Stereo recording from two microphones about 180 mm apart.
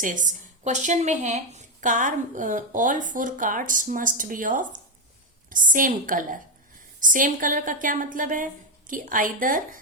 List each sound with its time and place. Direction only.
0.0 s speech: 45° right (ahead or behind)